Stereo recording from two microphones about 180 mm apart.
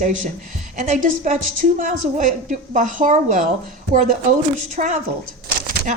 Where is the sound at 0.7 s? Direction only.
40° right (ahead or behind).